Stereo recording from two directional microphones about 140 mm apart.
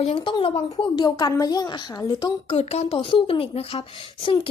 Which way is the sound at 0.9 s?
30° left (ahead or behind).